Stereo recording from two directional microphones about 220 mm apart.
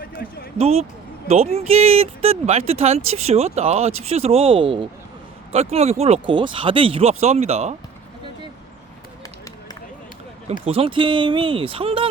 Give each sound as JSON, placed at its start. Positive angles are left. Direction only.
{"t": 0.2, "sound": "a sound", "side_deg": 45}
{"t": 0.6, "sound": "speech", "side_deg": -25}
{"t": 10.7, "sound": "speech", "side_deg": -25}